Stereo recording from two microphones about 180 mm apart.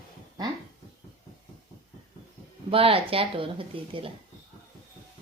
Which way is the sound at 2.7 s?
30° right (ahead or behind).